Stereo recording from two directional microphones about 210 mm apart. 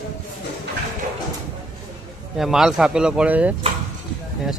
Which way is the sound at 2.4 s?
Centre (ahead or behind).